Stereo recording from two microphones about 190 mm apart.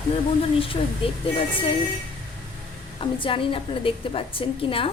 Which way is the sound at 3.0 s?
25° left (ahead or behind).